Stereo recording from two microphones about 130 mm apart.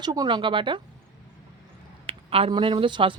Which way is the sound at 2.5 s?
40° right (ahead or behind).